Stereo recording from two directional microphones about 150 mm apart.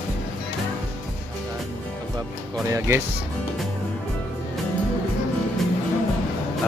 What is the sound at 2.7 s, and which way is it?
Speech, 20° right (ahead or behind).